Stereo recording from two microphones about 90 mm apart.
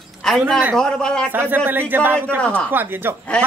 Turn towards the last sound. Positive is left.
turn(degrees=-25)  # may be behind; listen again after turning